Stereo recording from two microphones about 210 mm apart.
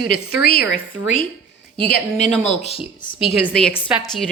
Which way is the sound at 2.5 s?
30° left (ahead or behind).